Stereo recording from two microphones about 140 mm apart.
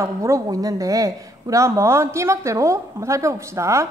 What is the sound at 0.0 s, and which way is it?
A woman's voice, 20° right (ahead or behind).